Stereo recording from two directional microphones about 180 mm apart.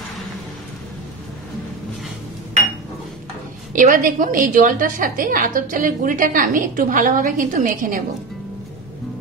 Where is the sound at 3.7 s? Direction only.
45° right (ahead or behind).